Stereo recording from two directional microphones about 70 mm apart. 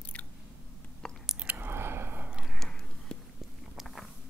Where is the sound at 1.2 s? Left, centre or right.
Centre.